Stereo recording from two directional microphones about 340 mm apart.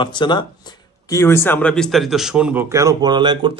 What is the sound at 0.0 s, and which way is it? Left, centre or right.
A man's voice, centre.